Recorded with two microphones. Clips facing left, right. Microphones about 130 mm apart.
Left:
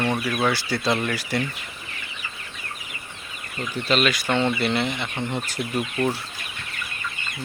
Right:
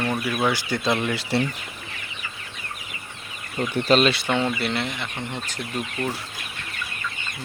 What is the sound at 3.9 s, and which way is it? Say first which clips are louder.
Speech: right 3 dB; 35° right (ahead or behind).